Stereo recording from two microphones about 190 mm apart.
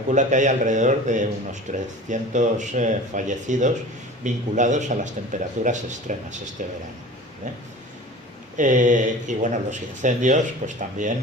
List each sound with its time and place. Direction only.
0.1 s speech: 40° right (ahead or behind)
8.5 s speech: 40° right (ahead or behind)